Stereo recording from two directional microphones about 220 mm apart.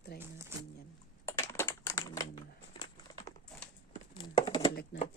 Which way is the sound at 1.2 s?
10° left (ahead or behind).